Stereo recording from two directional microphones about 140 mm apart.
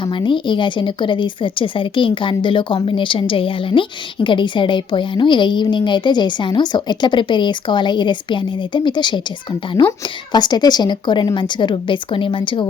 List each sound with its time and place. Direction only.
0.0 s a woman's voice: 35° left (ahead or behind)
10.3 s a woman's voice: 30° left (ahead or behind)